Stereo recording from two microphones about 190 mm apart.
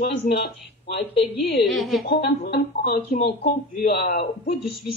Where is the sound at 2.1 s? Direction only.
55° left (ahead or behind).